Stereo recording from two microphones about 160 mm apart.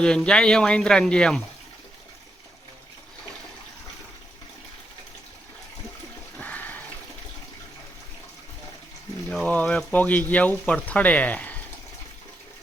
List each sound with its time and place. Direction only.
0.0 s speech: 5° left (ahead or behind)
6.3 s a sound: 10° left (ahead or behind)
9.3 s speech: 5° left (ahead or behind)